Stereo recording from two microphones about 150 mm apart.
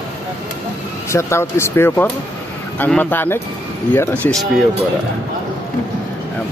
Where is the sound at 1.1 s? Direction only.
20° left (ahead or behind).